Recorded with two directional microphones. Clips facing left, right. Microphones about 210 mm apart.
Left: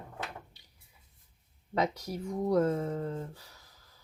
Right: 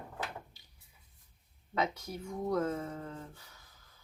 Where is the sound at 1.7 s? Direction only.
35° left (ahead or behind).